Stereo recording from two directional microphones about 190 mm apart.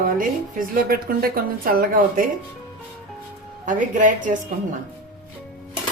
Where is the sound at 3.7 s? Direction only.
45° right (ahead or behind).